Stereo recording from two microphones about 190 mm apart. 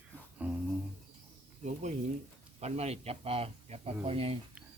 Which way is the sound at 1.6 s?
40° right (ahead or behind).